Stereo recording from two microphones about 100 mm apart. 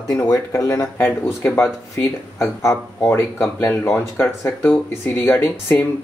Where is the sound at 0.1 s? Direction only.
30° left (ahead or behind).